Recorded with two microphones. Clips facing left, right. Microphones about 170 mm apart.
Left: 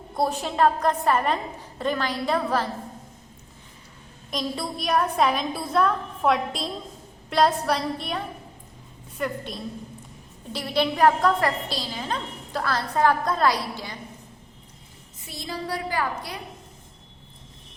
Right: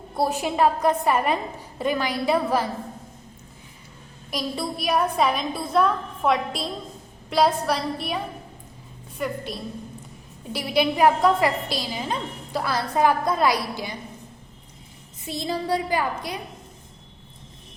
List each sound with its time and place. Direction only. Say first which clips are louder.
0.2 s a woman's voice: right 1 dB; 5° right (ahead or behind)
4.3 s a woman's voice: right 1 dB; 5° right (ahead or behind)
15.3 s a woman's voice: right 6 dB; 20° right (ahead or behind)